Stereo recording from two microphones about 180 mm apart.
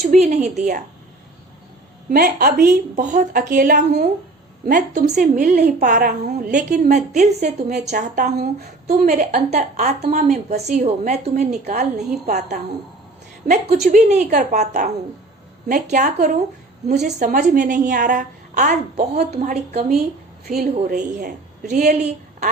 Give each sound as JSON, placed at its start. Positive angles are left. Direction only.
{"t": 0.0, "sound": "speech", "side_deg": -40}
{"t": 2.0, "sound": "a woman's voice", "side_deg": -55}
{"t": 3.0, "sound": "a woman's voice", "side_deg": -45}
{"t": 20.4, "sound": "a woman's voice", "side_deg": -60}